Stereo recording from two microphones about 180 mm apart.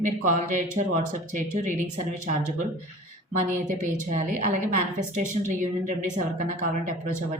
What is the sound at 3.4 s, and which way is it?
A woman's voice, 45° right (ahead or behind).